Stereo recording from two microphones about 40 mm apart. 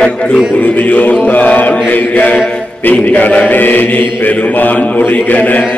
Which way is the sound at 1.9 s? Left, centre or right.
Left.